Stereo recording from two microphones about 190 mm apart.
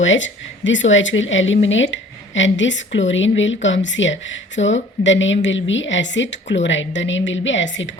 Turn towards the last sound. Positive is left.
turn(degrees=75)  # may be behind; listen again after turning